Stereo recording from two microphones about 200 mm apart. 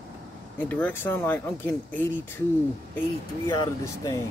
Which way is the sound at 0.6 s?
10° left (ahead or behind).